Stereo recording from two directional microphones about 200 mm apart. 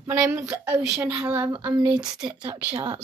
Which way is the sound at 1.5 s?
20° right (ahead or behind).